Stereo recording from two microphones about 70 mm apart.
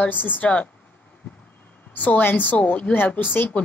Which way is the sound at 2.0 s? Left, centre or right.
Left.